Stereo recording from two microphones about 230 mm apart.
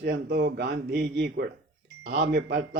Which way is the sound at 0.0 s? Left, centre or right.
Right.